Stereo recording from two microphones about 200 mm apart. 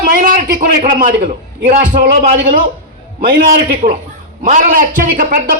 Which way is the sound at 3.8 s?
35° right (ahead or behind).